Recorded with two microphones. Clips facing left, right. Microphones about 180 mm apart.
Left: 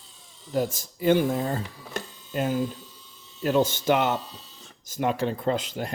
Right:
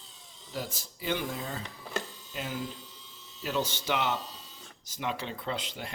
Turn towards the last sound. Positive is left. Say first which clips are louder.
# left 9 dB
turn(degrees=45)  # may be behind; listen again after turning